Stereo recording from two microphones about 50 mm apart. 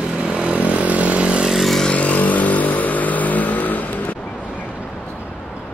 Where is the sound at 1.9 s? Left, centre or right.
Left.